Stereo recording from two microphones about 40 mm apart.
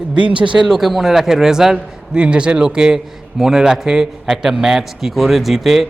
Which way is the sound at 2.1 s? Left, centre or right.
Right.